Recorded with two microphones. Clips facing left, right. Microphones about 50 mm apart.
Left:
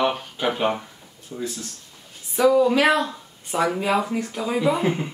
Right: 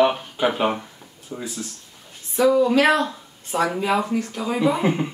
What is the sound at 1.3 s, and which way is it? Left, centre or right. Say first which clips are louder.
Speech: left 1 dB; right.